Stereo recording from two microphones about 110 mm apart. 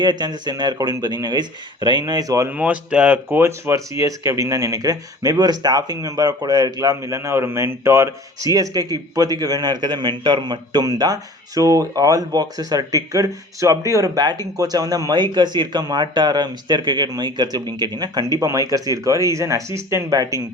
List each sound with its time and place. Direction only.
0.0 s speech: 40° right (ahead or behind)
2.5 s speech: 15° right (ahead or behind); by 20.4 s 30° right (ahead or behind)